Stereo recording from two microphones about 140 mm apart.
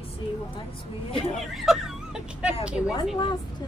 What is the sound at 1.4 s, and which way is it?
Speech, centre (ahead or behind).